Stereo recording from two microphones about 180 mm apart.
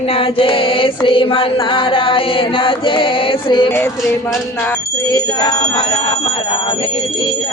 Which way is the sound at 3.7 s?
10° left (ahead or behind).